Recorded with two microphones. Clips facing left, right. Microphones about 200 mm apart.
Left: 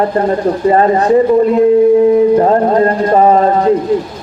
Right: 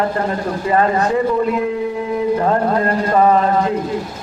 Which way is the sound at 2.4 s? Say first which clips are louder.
Left 7 dB; 35° left (ahead or behind).